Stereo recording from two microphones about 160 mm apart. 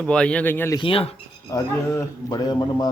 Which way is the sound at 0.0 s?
5° left (ahead or behind).